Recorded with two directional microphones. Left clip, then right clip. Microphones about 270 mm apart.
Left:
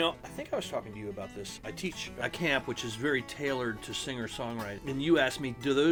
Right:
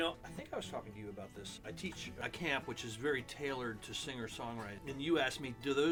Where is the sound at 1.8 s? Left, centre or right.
Left.